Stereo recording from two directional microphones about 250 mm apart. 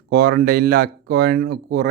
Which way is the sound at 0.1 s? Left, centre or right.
Right.